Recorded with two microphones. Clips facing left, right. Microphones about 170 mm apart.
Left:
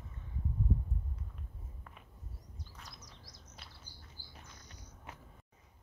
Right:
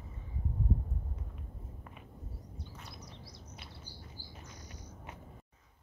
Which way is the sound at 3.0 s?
60° right (ahead or behind).